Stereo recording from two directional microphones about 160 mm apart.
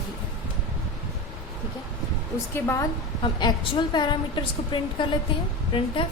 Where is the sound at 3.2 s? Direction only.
30° left (ahead or behind).